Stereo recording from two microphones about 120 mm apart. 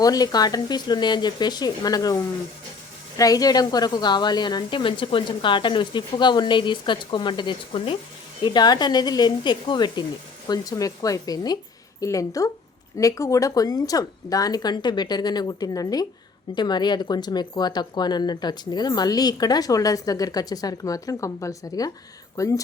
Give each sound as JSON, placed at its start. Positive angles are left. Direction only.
{"t": 0.0, "sound": "a woman's voice", "side_deg": 30}